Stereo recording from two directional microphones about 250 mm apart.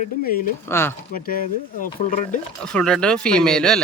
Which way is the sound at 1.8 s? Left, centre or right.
Left.